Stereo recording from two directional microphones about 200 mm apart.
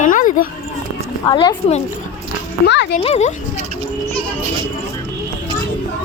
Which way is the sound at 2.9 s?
30° left (ahead or behind).